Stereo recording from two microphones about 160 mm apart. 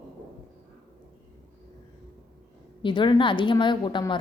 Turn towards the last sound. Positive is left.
turn(degrees=30)  # may be behind; listen again after turning